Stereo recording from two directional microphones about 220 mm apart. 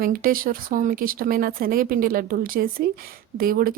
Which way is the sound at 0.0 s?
40° right (ahead or behind).